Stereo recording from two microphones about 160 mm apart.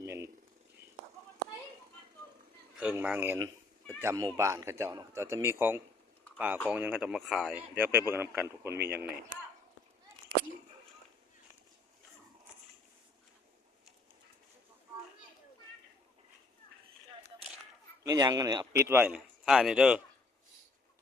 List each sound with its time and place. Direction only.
0.0 s a sound: 15° right (ahead or behind)
2.7 s a man's voice: 10° right (ahead or behind)
7.8 s a man's voice: 15° right (ahead or behind)
18.0 s a man's voice: 25° right (ahead or behind); by 20.0 s 5° right (ahead or behind)